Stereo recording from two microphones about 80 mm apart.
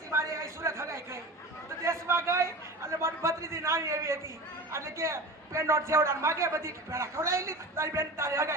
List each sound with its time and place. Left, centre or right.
0.1 s a sound: right
1.8 s chatter: right
4.7 s a man's voice: right